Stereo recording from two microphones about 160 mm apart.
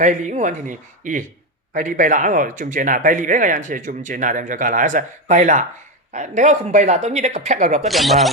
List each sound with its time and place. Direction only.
0.0 s speech: 50° right (ahead or behind)
7.9 s speech: centre (ahead or behind)